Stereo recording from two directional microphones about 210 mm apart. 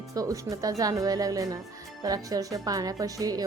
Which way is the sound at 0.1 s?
15° right (ahead or behind).